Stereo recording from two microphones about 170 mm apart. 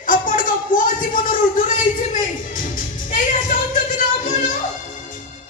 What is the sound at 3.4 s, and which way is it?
Music, 50° left (ahead or behind).